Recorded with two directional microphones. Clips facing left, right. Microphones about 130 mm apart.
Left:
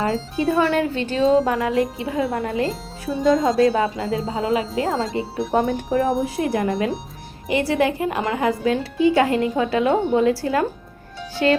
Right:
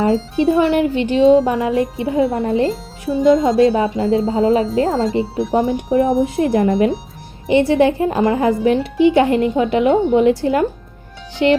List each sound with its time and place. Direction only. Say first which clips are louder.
0.0 s speech: right 6 dB; 25° right (ahead or behind)
2.6 s speech: right 5 dB; centre (ahead or behind)
3.6 s speech: right 4 dB; 25° right (ahead or behind)